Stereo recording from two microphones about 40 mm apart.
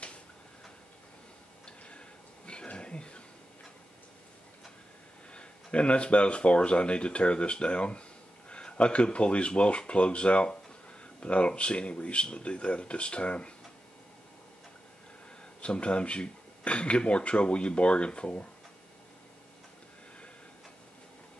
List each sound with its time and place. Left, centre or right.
1.9 s a sound: left
5.3 s speech: left
15.6 s speech: left